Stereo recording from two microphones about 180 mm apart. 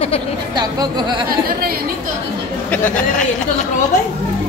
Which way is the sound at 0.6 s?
25° right (ahead or behind).